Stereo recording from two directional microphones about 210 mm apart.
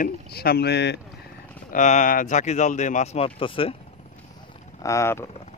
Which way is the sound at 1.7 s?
35° left (ahead or behind).